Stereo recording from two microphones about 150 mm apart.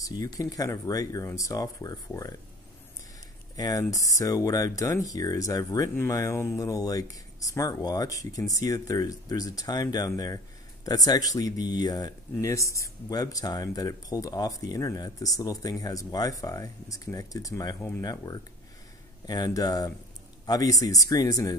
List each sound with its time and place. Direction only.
0.1 s speech: 25° left (ahead or behind)
3.5 s speech: 25° left (ahead or behind)